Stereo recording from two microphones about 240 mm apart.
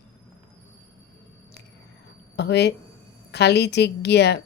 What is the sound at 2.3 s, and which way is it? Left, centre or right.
A woman's voice, left.